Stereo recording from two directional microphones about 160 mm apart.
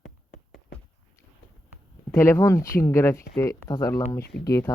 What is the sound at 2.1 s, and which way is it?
Speech, 15° left (ahead or behind).